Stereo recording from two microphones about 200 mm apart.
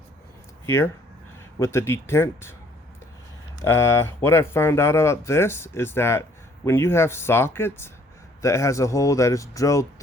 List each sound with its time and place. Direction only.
0.6 s speech: 15° left (ahead or behind)
3.6 s speech: 15° left (ahead or behind)